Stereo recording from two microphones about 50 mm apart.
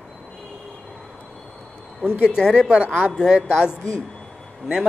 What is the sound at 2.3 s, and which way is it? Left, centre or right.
Speech, centre.